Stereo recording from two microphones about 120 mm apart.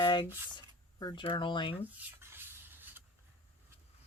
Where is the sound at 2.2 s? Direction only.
20° right (ahead or behind).